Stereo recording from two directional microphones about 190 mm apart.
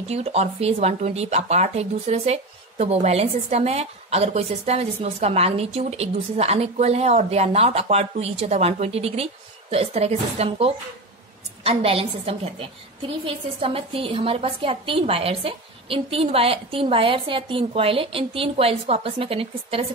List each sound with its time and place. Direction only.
0.1 s a woman's voice: 35° right (ahead or behind)